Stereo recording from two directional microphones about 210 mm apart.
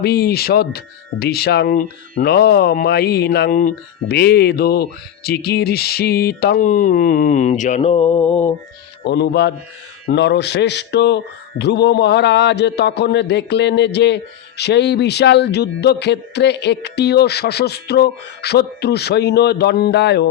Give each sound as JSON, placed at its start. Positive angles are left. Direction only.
{"t": 0.0, "sound": "a man's voice", "side_deg": 50}
{"t": 8.3, "sound": "lullaby", "side_deg": 25}
{"t": 9.0, "sound": "a man's voice", "side_deg": 55}